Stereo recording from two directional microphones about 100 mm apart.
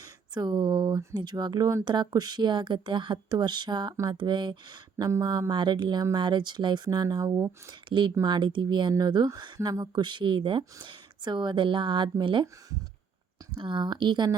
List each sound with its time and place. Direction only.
0.3 s speech: 45° right (ahead or behind)
7.7 s speech: 50° right (ahead or behind)
13.5 s speech: 55° right (ahead or behind)